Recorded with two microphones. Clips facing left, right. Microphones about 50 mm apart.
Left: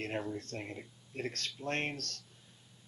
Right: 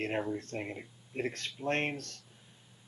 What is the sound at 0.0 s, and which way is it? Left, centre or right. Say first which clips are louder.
Speech: right 4 dB; centre.